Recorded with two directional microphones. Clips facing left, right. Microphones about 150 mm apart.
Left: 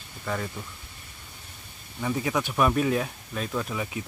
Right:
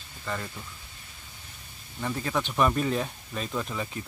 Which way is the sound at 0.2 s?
5° left (ahead or behind).